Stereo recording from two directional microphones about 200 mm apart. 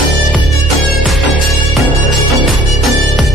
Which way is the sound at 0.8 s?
Centre (ahead or behind).